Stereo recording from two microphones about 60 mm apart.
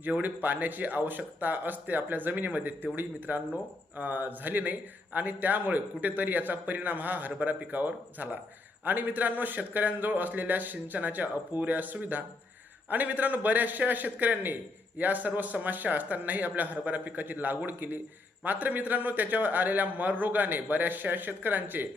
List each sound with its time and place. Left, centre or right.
0.0 s a man's voice: right